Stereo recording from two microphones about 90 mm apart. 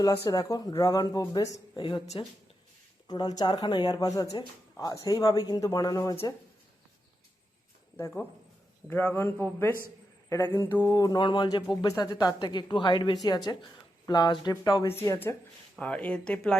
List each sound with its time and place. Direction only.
0.0 s speech: 45° left (ahead or behind)
1.7 s a woman's voice: 60° left (ahead or behind)
3.1 s speech: 50° left (ahead or behind)
8.0 s a man's voice: 25° left (ahead or behind)
10.9 s speech: 45° left (ahead or behind)
11.2 s a woman's voice: 60° left (ahead or behind)
11.7 s speech: 45° left (ahead or behind)
12.2 s a woman's voice: 55° left (ahead or behind)
13.2 s speech: 50° left (ahead or behind)
14.8 s speech: 35° left (ahead or behind)
15.8 s speech: 15° left (ahead or behind)